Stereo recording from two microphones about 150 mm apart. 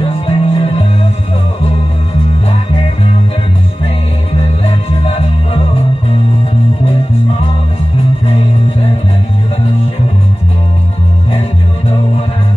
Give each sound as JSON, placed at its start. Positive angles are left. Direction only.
{"t": 0.0, "sound": "music", "side_deg": 40}
{"t": 4.6, "sound": "music", "side_deg": 40}